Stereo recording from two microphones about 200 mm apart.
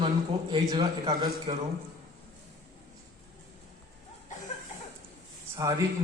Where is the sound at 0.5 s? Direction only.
20° right (ahead or behind).